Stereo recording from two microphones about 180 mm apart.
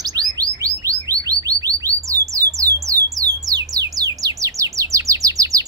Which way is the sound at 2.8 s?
20° right (ahead or behind).